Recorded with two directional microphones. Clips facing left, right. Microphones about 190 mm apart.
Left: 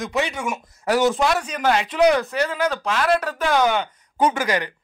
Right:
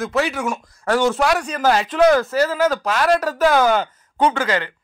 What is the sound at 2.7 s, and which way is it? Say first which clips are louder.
Speech: right 3 dB; 40° right (ahead or behind).